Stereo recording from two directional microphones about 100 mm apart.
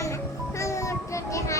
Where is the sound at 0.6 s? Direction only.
30° left (ahead or behind).